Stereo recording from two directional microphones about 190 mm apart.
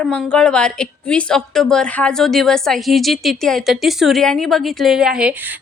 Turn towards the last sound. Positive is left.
turn(degrees=-5)  # may be behind; listen again after turning